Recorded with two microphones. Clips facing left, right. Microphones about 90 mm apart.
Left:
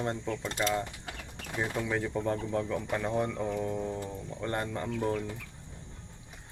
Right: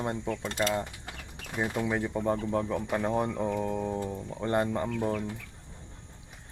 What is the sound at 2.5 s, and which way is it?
Speech, 30° right (ahead or behind).